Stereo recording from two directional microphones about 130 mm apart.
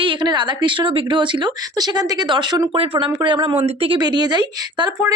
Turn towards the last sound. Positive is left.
turn(degrees=-30)  # may be behind; listen again after turning